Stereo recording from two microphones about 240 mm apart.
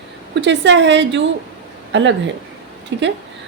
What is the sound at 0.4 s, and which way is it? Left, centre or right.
A woman's voice, right.